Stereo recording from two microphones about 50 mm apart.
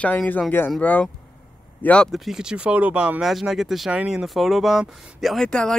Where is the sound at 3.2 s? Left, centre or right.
Centre.